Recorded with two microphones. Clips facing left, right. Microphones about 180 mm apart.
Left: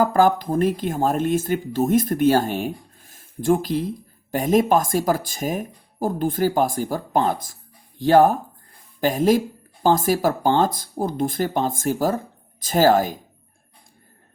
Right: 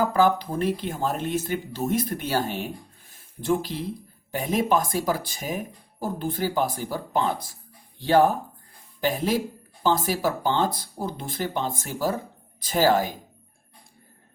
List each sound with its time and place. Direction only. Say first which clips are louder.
0.0 s speech: left 4 dB; 45° left (ahead or behind)
3.1 s a sound: left 5 dB; 45° left (ahead or behind)
4.3 s speech: left 6 dB; 45° left (ahead or behind)